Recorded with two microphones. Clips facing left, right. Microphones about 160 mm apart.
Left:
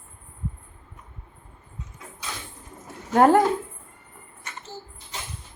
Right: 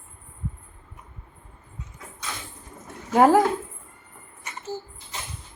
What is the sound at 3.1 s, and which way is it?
Speech, 5° right (ahead or behind).